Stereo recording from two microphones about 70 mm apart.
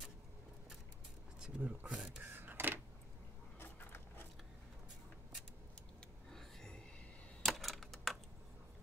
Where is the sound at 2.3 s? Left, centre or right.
Right.